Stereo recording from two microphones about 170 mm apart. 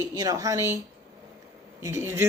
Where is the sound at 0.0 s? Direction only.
20° right (ahead or behind).